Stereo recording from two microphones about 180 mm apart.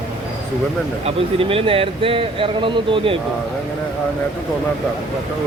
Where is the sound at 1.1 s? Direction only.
30° right (ahead or behind).